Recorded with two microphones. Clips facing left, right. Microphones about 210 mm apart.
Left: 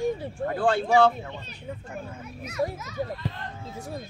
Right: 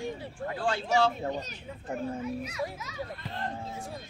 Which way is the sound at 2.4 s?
50° left (ahead or behind).